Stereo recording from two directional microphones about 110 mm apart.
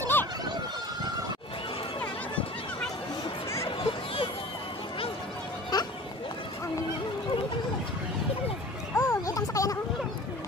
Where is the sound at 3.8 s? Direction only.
50° left (ahead or behind).